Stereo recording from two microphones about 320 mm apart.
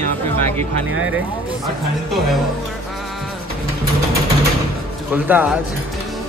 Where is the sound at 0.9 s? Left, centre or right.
Right.